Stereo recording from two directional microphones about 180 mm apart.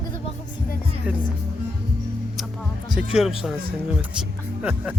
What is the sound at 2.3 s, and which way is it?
Music, centre (ahead or behind).